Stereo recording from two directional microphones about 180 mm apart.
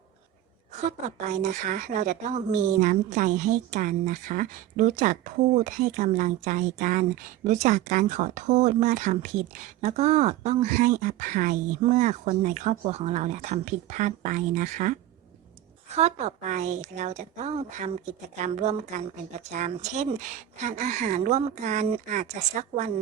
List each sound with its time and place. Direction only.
0.9 s speech: 40° right (ahead or behind)
16.0 s speech: 40° right (ahead or behind)